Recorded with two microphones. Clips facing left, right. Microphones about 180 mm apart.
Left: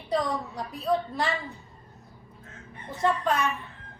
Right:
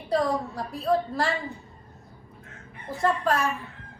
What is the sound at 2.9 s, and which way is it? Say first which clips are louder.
Speech: right 1 dB; centre (ahead or behind).